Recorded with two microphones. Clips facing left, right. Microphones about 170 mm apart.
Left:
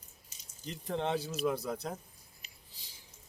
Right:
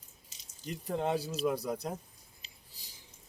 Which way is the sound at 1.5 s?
10° right (ahead or behind).